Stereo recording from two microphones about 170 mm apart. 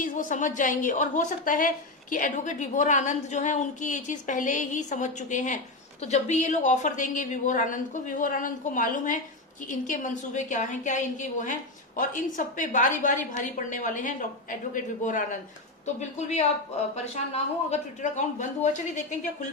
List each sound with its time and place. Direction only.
0.0 s a woman's voice: 50° left (ahead or behind)